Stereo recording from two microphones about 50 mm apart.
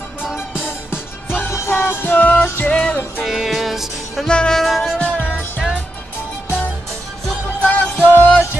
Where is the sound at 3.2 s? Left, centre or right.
Centre.